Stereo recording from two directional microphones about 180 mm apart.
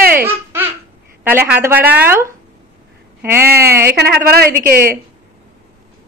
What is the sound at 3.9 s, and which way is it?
Speech, 60° right (ahead or behind).